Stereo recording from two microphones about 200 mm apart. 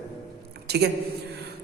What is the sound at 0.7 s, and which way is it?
Speech, 55° right (ahead or behind).